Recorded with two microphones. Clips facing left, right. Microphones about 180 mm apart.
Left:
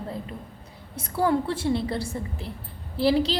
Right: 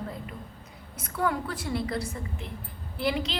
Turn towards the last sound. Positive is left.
turn(degrees=35)  # may be behind; listen again after turning